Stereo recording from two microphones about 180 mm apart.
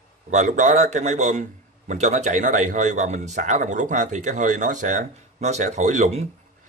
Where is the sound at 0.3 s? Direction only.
40° right (ahead or behind).